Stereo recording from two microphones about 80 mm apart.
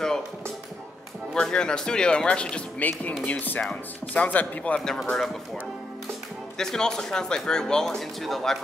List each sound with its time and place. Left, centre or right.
1.3 s speech: centre
6.6 s speech: centre